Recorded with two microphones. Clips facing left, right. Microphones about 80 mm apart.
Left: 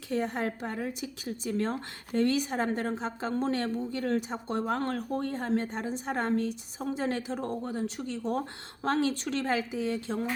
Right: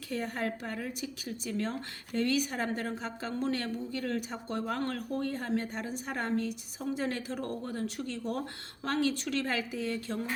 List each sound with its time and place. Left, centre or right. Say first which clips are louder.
0.1 s a woman's voice: left 4 dB; left